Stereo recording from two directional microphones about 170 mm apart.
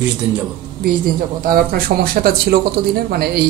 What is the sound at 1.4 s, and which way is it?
Speech, 60° right (ahead or behind).